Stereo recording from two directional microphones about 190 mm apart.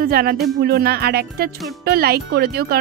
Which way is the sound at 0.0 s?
55° right (ahead or behind).